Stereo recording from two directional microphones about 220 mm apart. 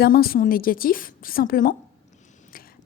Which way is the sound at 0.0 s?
45° left (ahead or behind).